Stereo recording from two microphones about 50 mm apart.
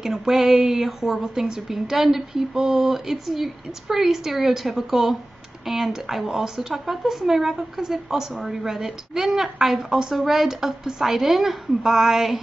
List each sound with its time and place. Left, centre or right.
0.0 s speech: centre